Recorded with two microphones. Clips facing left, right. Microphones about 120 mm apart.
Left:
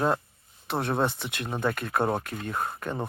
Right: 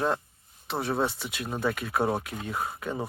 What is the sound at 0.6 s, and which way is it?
Speech, centre (ahead or behind).